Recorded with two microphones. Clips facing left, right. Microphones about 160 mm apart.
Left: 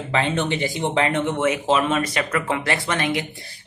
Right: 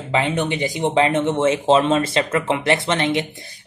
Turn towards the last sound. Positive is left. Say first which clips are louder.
# right 3 dB
turn(degrees=-25)  # may be behind; listen again after turning